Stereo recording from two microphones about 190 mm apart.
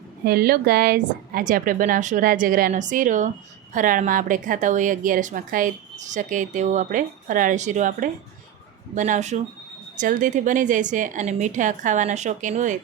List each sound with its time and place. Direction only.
0.3 s a woman's voice: 55° right (ahead or behind)